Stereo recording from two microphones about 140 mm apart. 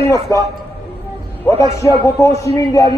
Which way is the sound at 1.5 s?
25° left (ahead or behind).